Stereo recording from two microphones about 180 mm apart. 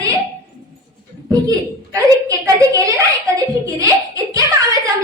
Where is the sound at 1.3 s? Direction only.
20° right (ahead or behind).